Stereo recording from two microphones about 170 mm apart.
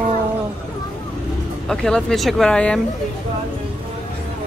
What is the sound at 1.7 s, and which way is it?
Speech, 5° left (ahead or behind).